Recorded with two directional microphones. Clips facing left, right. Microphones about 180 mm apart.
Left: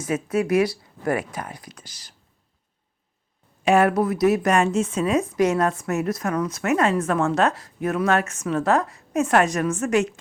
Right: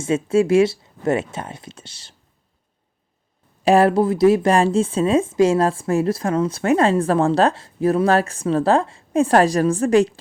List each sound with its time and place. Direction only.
0.0 s speech: 25° right (ahead or behind)
3.6 s speech: 35° right (ahead or behind)